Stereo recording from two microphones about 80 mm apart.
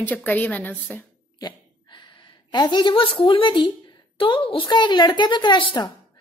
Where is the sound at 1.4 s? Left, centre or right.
Left.